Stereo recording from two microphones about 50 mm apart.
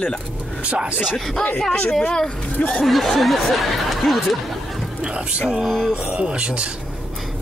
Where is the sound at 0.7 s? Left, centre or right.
Right.